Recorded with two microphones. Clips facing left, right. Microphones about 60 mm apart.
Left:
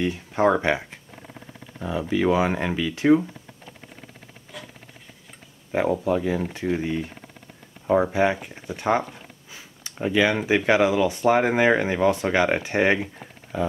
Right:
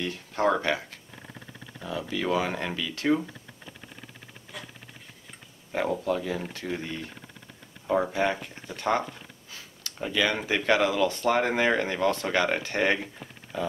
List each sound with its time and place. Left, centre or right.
0.0 s speech: centre
5.7 s speech: centre